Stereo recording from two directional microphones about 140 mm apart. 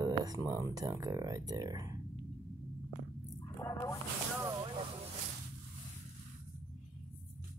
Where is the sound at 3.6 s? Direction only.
20° left (ahead or behind).